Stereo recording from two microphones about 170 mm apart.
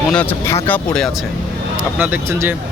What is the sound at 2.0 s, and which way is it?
Speech, 10° right (ahead or behind).